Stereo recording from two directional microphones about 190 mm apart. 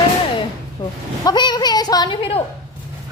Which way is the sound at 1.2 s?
25° left (ahead or behind).